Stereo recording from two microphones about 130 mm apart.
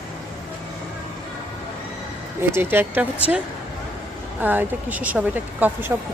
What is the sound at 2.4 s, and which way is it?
Speech, 15° right (ahead or behind).